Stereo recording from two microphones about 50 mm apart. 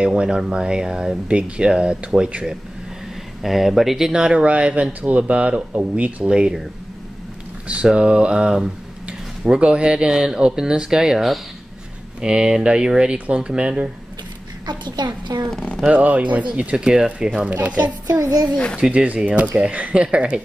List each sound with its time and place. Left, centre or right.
0.0 s speech: right
3.4 s speech: centre
4.1 s speech: centre
6.2 s speech: centre
7.6 s speech: right
15.5 s speech: centre
15.9 s speech: right; by 17.3 s centre
17.6 s a child's voice: right